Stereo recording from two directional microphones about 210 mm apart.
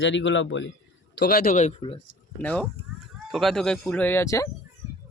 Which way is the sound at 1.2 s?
45° left (ahead or behind).